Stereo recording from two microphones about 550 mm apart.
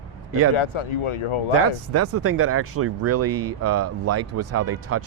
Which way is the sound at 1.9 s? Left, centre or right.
Right.